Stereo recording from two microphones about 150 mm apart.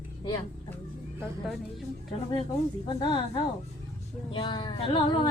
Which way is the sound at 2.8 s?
30° left (ahead or behind).